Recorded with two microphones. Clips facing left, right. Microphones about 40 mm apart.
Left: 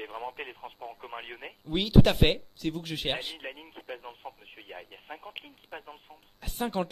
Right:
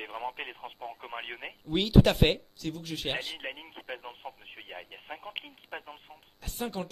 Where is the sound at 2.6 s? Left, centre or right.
Left.